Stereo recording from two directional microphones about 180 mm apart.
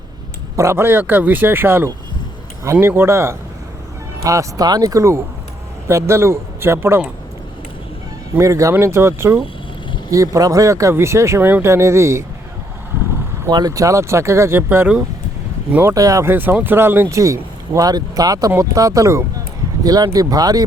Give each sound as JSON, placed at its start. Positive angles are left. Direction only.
{"t": 0.5, "sound": "speech", "side_deg": -15}
{"t": 8.4, "sound": "speech", "side_deg": -15}
{"t": 13.4, "sound": "speech", "side_deg": -20}